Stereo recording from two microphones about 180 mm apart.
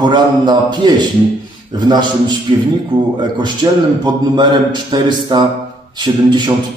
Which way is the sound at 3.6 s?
25° right (ahead or behind).